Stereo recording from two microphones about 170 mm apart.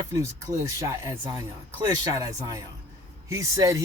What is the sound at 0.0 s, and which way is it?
Speech, 15° right (ahead or behind).